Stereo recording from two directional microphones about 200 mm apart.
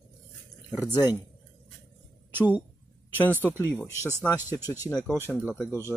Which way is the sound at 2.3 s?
10° right (ahead or behind).